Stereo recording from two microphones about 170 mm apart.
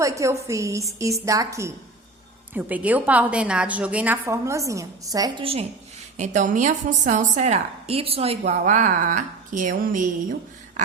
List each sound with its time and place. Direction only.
0.0 s a woman's voice: 20° right (ahead or behind)
6.1 s a woman's voice: 45° right (ahead or behind)